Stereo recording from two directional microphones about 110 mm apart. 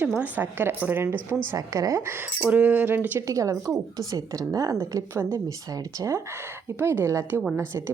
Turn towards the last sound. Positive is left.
turn(degrees=-25)  # may be behind; listen again after turning